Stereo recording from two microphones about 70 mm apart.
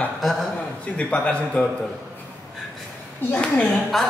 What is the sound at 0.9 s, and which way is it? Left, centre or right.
Speech, centre.